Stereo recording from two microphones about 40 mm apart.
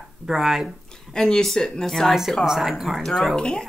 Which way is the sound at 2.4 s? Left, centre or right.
Centre.